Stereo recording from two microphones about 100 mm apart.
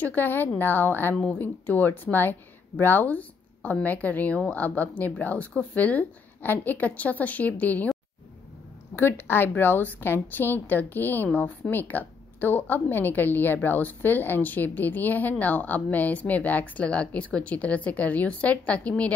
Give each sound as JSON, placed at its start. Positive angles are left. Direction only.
{"t": 0.0, "sound": "a woman's voice", "side_deg": 20}
{"t": 8.9, "sound": "a woman's voice", "side_deg": 20}